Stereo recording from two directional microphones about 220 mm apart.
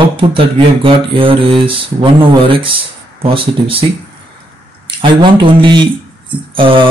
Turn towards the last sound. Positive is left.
turn(degrees=-25)  # may be behind; listen again after turning